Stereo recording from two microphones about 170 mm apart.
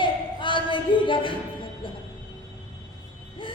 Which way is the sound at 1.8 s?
30° left (ahead or behind).